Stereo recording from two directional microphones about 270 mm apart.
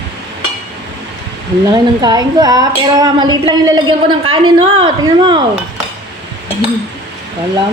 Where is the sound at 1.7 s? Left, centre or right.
Centre.